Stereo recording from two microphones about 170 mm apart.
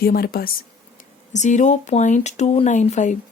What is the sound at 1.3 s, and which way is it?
A woman's voice, 45° left (ahead or behind).